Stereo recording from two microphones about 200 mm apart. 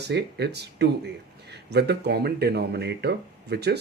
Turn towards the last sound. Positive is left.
turn(degrees=-55)  # may be behind; listen again after turning